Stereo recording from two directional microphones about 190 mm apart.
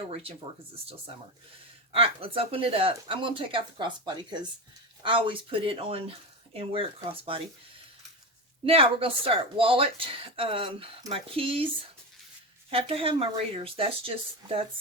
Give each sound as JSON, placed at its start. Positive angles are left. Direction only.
{"t": 0.1, "sound": "speech", "side_deg": -30}
{"t": 1.9, "sound": "speech", "side_deg": -30}
{"t": 8.6, "sound": "speech", "side_deg": -30}
{"t": 12.7, "sound": "speech", "side_deg": -30}